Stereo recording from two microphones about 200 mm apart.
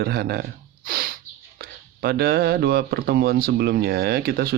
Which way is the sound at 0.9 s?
50° right (ahead or behind).